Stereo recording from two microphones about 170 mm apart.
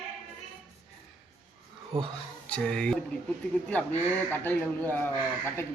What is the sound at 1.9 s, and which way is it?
Speech, centre (ahead or behind).